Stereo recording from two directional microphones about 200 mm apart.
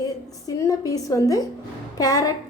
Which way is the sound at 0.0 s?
20° left (ahead or behind).